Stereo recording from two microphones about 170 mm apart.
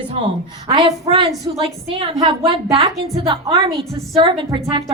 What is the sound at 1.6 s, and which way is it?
A woman's voice, 35° right (ahead or behind).